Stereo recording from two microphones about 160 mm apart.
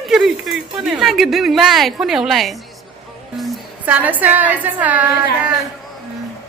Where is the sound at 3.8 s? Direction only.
10° right (ahead or behind).